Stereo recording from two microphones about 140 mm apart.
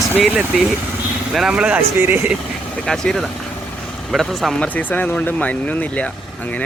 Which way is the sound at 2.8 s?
5° left (ahead or behind).